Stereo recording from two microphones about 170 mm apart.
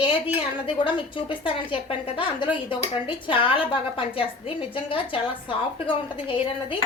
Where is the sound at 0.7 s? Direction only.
30° left (ahead or behind).